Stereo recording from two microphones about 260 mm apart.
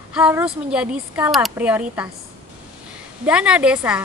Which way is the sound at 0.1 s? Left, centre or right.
Centre.